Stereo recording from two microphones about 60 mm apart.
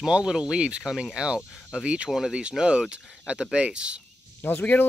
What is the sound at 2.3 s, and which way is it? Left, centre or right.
Speech, centre.